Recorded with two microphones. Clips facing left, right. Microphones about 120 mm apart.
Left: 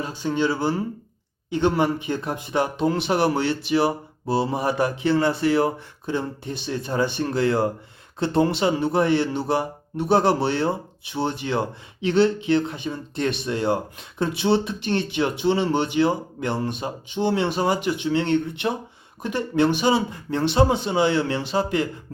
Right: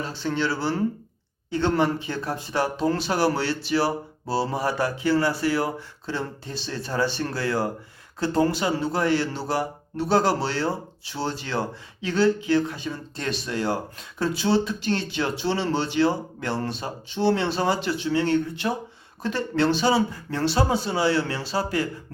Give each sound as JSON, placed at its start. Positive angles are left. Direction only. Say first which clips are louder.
{"t": 0.0, "sound": "speech", "louder": "left 3 dB", "side_deg": 15}